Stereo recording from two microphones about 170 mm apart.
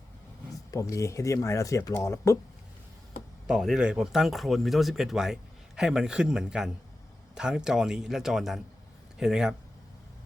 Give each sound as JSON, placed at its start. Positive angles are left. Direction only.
{"t": 0.7, "sound": "speech", "side_deg": 20}
{"t": 3.4, "sound": "speech", "side_deg": 0}